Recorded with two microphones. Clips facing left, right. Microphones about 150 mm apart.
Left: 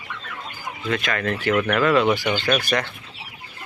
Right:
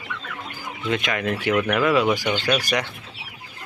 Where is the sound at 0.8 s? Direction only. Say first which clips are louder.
Even; 20° right (ahead or behind).